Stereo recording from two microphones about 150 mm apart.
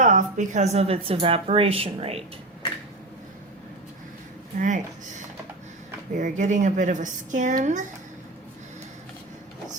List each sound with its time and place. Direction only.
0.0 s a woman's voice: 60° right (ahead or behind); by 2.2 s 40° right (ahead or behind)
4.6 s speech: 55° right (ahead or behind)